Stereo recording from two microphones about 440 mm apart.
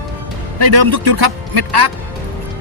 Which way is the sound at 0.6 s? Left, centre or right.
Right.